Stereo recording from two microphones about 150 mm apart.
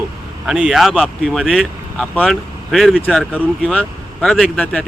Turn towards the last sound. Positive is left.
turn(degrees=5)  # may be behind; listen again after turning